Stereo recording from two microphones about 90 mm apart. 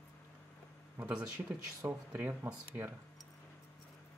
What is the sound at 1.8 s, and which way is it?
Speech, 25° right (ahead or behind).